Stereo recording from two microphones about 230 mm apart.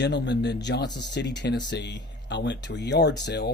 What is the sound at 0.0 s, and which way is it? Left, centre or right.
Speech, left.